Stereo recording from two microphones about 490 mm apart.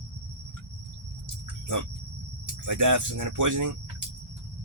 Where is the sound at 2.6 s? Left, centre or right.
Right.